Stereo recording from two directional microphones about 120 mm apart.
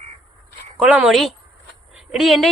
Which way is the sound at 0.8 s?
10° right (ahead or behind).